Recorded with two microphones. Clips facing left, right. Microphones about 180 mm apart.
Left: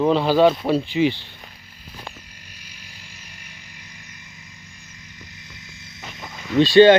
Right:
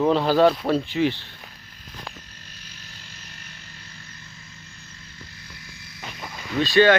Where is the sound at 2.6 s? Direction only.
10° left (ahead or behind).